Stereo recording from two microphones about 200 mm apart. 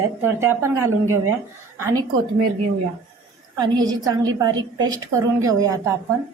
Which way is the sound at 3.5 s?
20° right (ahead or behind).